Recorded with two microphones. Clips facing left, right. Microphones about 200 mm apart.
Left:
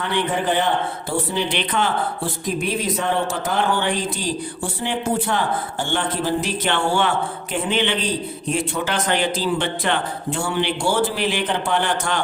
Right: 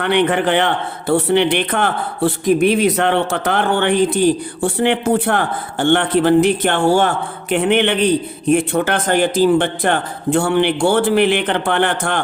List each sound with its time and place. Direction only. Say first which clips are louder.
0.0 s speech: right 7 dB; 70° right (ahead or behind); by 7.1 s 45° right (ahead or behind)
7.5 s a man's voice: right 7 dB; 65° right (ahead or behind)